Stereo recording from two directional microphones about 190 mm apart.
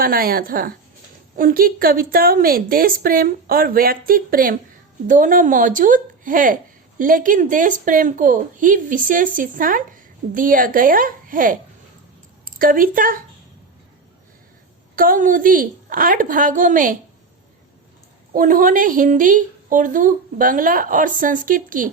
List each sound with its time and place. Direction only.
0.0 s a woman's voice: 50° right (ahead or behind)
14.9 s a woman's voice: 45° right (ahead or behind)
18.3 s a woman's voice: 45° right (ahead or behind)